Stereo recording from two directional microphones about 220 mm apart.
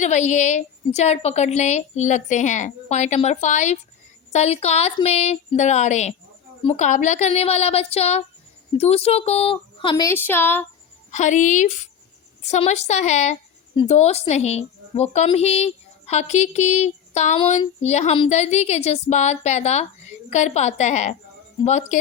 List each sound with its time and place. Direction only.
0.0 s a woman's voice: 30° left (ahead or behind); by 10.7 s 10° left (ahead or behind)
11.1 s a woman's voice: 35° left (ahead or behind)